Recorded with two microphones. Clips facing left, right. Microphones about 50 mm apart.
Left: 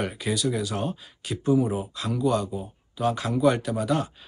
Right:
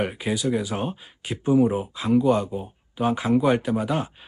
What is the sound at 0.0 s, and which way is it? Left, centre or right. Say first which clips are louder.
Speech: right 2 dB; right.